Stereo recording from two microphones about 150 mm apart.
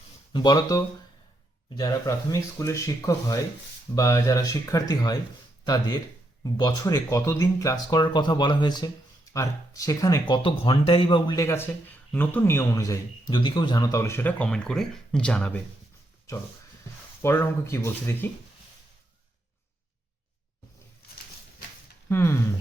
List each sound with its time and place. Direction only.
0.3 s speech: 25° left (ahead or behind); by 15.6 s 10° left (ahead or behind)
17.2 s speech: 15° left (ahead or behind)
22.1 s speech: 20° left (ahead or behind)